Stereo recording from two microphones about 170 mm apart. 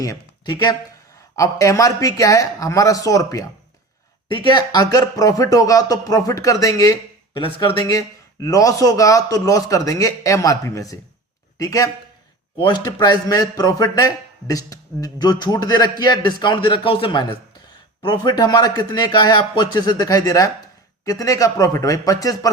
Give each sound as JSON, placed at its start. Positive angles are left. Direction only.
{"t": 0.0, "sound": "a man's voice", "side_deg": 25}
{"t": 7.4, "sound": "a man's voice", "side_deg": 30}